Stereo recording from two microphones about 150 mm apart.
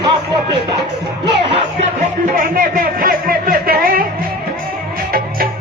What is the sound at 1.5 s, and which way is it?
Music, 40° right (ahead or behind).